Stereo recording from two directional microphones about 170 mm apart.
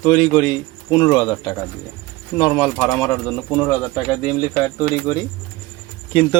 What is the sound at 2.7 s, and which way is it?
Speech, 10° left (ahead or behind).